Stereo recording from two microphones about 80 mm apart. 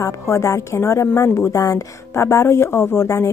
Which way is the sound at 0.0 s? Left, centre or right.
Left.